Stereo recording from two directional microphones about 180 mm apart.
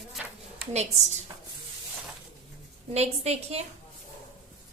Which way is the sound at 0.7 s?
40° right (ahead or behind).